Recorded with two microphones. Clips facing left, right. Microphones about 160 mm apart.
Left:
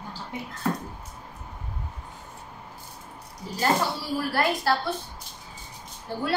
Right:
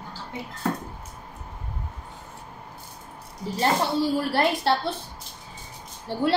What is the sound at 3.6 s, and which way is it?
A woman's voice, 25° right (ahead or behind).